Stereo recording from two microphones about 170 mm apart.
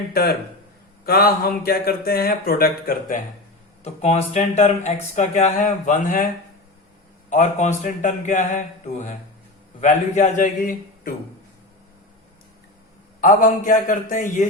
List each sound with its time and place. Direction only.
0.1 s speech: 60° left (ahead or behind)
3.8 s speech: 40° left (ahead or behind)
7.3 s speech: 45° left (ahead or behind)
13.2 s speech: 50° left (ahead or behind)